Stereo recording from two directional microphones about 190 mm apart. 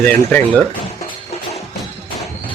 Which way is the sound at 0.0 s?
5° left (ahead or behind).